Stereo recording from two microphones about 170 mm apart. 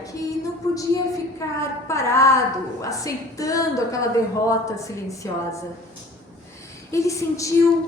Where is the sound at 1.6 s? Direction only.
15° left (ahead or behind).